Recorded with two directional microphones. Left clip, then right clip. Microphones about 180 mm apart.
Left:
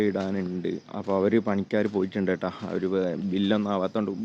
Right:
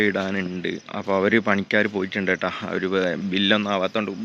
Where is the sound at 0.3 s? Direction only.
15° left (ahead or behind).